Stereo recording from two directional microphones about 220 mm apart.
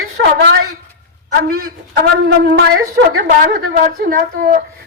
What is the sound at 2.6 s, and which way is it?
Wind instrument, 45° right (ahead or behind).